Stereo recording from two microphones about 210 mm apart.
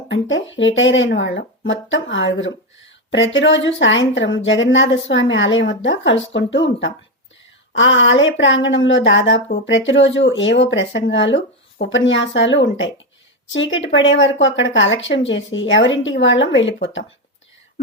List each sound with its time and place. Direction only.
0.1 s a woman's voice: 60° left (ahead or behind)